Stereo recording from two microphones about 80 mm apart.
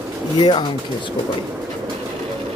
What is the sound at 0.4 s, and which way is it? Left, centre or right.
Speech, left.